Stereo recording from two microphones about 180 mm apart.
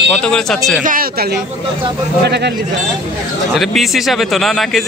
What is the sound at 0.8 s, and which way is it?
Speech, 55° right (ahead or behind).